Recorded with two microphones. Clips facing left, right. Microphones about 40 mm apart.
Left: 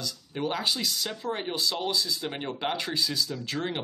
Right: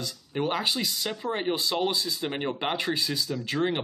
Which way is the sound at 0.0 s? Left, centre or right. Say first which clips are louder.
Right 2 dB; centre.